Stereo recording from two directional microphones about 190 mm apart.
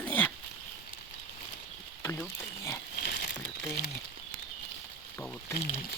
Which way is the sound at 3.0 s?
50° left (ahead or behind).